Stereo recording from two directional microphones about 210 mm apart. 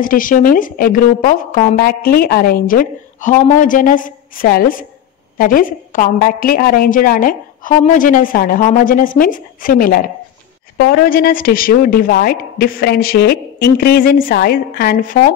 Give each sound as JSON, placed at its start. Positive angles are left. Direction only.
{"t": 0.0, "sound": "a woman's voice", "side_deg": 40}